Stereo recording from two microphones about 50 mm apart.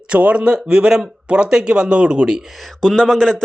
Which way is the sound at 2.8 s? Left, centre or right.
Centre.